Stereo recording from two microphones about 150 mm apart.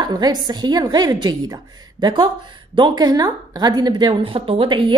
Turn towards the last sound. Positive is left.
turn(degrees=-35)  # may be behind; listen again after turning